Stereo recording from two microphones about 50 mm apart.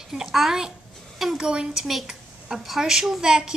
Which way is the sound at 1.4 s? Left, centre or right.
Centre.